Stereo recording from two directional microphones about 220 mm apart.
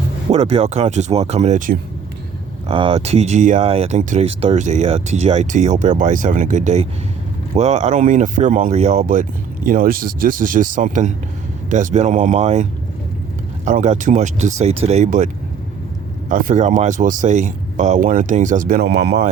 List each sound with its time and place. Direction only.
0.3 s speech: 25° right (ahead or behind)
2.6 s speech: 25° right (ahead or behind)
13.7 s speech: 35° right (ahead or behind)
16.3 s speech: 35° right (ahead or behind)